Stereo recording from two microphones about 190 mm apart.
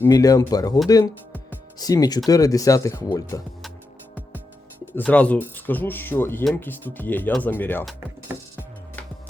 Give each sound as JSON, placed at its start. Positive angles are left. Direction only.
{"t": 0.0, "sound": "speech", "side_deg": 20}
{"t": 0.9, "sound": "music", "side_deg": 20}
{"t": 1.8, "sound": "speech", "side_deg": 20}
{"t": 4.9, "sound": "speech", "side_deg": 5}
{"t": 8.3, "sound": "music", "side_deg": -10}